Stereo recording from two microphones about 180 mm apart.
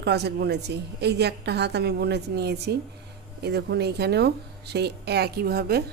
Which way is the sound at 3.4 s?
65° right (ahead or behind).